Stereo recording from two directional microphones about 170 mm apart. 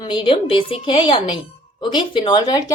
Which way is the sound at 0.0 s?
30° left (ahead or behind).